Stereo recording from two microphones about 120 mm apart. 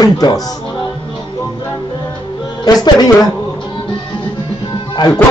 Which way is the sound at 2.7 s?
30° left (ahead or behind).